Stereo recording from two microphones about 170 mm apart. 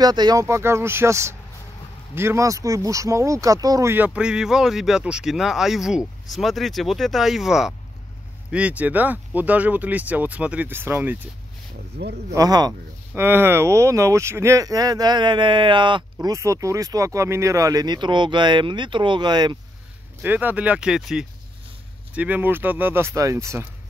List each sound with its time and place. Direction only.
0.0 s speech: 25° right (ahead or behind)
12.0 s speech: 85° right
12.4 s speech: 25° right (ahead or behind)
13.1 s speech: 10° right (ahead or behind)
20.2 s speech: 10° right (ahead or behind)